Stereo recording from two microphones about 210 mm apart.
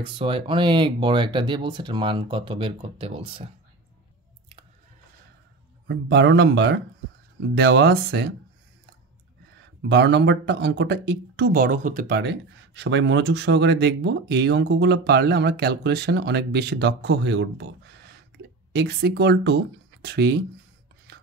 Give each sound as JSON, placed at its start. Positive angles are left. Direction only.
{"t": 0.0, "sound": "speech", "side_deg": -25}
{"t": 5.9, "sound": "speech", "side_deg": -55}
{"t": 9.8, "sound": "speech", "side_deg": -55}